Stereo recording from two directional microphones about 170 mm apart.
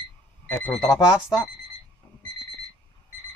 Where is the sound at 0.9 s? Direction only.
20° left (ahead or behind).